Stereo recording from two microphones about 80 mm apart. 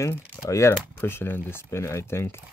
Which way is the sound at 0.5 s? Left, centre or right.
Left.